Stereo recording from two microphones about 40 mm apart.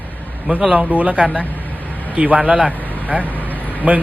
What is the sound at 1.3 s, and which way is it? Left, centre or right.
Vehicle, left.